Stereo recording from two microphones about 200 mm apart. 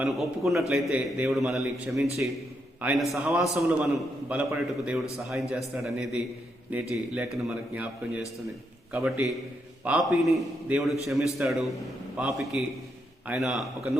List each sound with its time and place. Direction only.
0.0 s a man's voice: centre (ahead or behind)